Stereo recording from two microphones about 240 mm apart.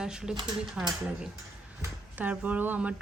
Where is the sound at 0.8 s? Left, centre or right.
Centre.